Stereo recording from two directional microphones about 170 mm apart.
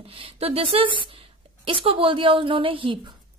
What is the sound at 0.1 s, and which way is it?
A woman's voice, 35° right (ahead or behind).